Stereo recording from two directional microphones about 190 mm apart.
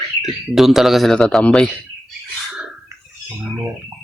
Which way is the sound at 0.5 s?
Centre (ahead or behind).